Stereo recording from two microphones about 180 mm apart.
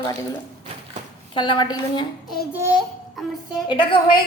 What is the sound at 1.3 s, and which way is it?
Speech, 25° left (ahead or behind).